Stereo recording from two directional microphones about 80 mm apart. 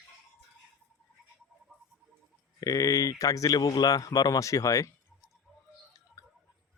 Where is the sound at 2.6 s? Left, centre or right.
Left.